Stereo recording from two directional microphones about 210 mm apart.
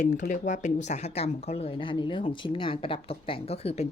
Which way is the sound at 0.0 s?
35° left (ahead or behind).